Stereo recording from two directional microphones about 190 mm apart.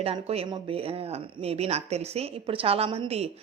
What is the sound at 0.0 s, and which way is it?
A woman's voice, 30° right (ahead or behind).